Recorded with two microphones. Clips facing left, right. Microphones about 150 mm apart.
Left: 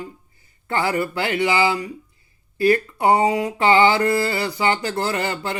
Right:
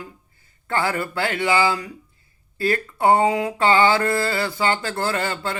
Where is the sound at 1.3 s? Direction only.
50° right (ahead or behind).